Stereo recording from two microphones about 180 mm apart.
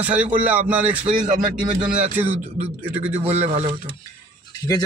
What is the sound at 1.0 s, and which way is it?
Speech, 45° right (ahead or behind).